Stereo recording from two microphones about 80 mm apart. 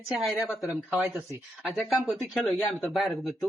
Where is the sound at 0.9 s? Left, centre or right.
Right.